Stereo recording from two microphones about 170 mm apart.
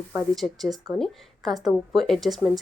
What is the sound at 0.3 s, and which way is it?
A woman's voice, centre (ahead or behind).